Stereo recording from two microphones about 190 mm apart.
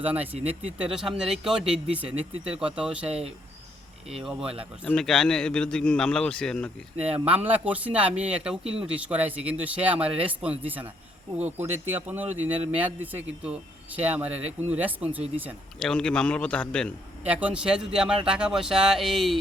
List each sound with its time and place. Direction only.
0.0 s a man's voice: 10° right (ahead or behind)
3.1 s speech: 35° right (ahead or behind)
4.1 s speech: centre (ahead or behind)
7.0 s a man's voice: 5° right (ahead or behind)
15.8 s speech: 5° left (ahead or behind)
17.2 s speech: 5° right (ahead or behind)